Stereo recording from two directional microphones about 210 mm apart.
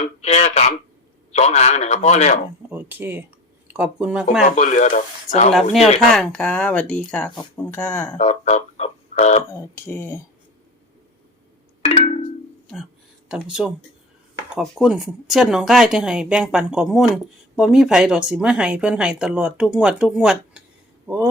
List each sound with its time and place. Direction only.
0.0 s a man's voice: 30° left (ahead or behind)
2.6 s a sound: 10° right (ahead or behind)
3.7 s speech: 5° right (ahead or behind)
4.5 s a man's voice: 35° left (ahead or behind)
6.1 s speech: 5° left (ahead or behind)
8.2 s speech: 30° left (ahead or behind)
9.5 s speech: 10° left (ahead or behind)
11.8 s a sound: 30° left (ahead or behind)
12.7 s speech: centre (ahead or behind)